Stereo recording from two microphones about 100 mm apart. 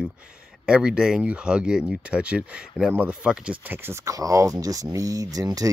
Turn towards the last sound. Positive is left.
turn(degrees=-40)  # may be behind; listen again after turning